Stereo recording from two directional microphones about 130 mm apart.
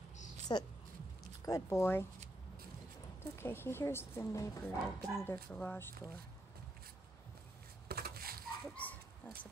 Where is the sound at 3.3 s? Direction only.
20° left (ahead or behind).